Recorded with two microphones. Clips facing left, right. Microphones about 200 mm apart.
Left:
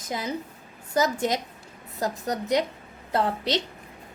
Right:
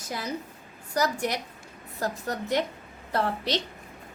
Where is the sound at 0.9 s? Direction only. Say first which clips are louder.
Left 3 dB; 20° left (ahead or behind).